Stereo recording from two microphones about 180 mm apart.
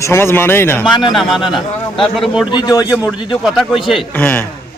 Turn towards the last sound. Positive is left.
turn(degrees=10)  # may be behind; listen again after turning